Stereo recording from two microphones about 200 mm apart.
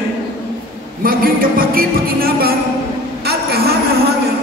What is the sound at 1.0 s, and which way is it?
Music, 45° right (ahead or behind).